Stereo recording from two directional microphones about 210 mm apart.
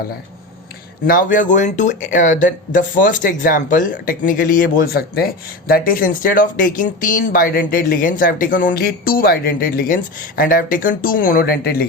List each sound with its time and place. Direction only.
1.0 s speech: 40° left (ahead or behind)